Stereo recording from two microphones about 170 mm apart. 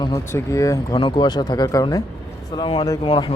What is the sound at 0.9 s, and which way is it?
Speech, 30° left (ahead or behind).